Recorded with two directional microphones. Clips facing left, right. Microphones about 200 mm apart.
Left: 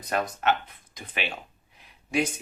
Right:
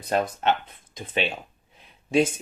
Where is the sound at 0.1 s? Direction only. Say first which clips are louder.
Right 2 dB; 25° right (ahead or behind).